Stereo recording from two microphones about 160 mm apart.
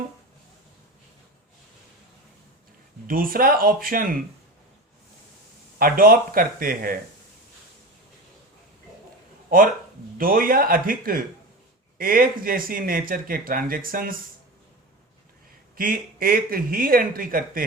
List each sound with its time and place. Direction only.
3.1 s speech: 65° right (ahead or behind)
5.8 s speech: 65° right (ahead or behind)
9.5 s speech: 65° right (ahead or behind)
15.7 s speech: 65° right (ahead or behind)